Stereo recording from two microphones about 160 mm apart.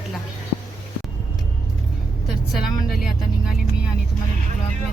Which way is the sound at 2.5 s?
5° right (ahead or behind).